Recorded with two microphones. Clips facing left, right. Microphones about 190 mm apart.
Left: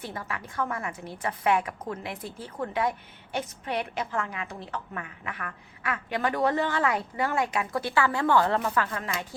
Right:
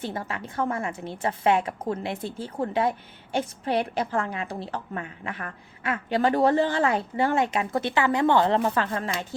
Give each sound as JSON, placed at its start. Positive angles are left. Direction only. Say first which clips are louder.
{"t": 0.0, "sound": "a woman's voice", "louder": "right 4 dB", "side_deg": -25}